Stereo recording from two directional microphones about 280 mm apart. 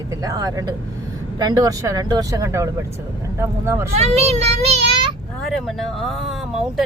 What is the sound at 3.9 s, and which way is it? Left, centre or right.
Speech, right.